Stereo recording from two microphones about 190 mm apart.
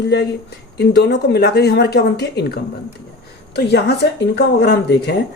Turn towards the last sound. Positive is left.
turn(degrees=60)  # may be behind; listen again after turning